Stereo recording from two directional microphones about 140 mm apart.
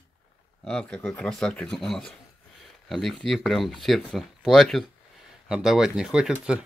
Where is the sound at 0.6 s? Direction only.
5° left (ahead or behind).